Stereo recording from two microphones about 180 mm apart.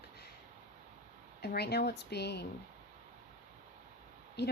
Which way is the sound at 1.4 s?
65° left (ahead or behind).